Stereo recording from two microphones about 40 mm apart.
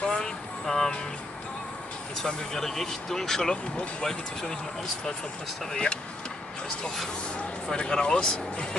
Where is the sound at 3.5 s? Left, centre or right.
Left.